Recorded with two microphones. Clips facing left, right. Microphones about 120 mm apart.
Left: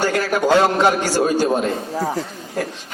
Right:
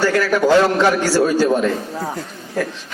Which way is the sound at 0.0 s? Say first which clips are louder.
Right 3 dB; 20° left (ahead or behind).